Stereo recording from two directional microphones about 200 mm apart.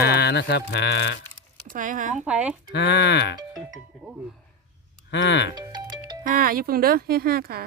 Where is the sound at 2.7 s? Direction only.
55° left (ahead or behind).